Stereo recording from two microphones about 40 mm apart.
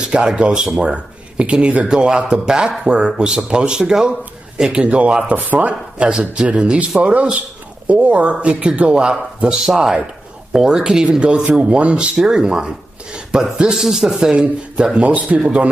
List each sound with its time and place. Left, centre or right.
0.0 s speech: right
5.3 s speech: right
6.0 s speech: right
10.7 s a man's voice: centre
14.3 s speech: right